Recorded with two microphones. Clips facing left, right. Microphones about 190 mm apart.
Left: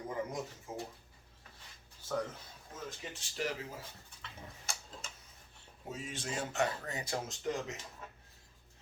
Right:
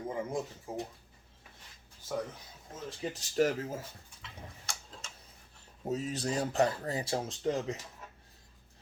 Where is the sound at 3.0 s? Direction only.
40° right (ahead or behind).